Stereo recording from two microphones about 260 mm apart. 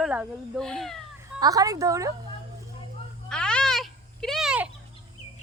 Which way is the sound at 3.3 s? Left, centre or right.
Centre.